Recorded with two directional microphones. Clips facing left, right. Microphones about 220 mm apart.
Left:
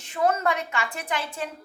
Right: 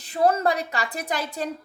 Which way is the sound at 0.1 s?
35° right (ahead or behind).